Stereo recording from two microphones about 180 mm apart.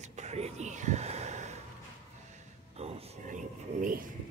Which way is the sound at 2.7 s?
35° right (ahead or behind).